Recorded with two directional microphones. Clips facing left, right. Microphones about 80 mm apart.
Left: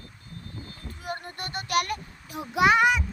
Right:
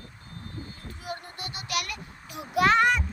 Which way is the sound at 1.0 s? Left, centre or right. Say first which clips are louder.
Left 3 dB; left.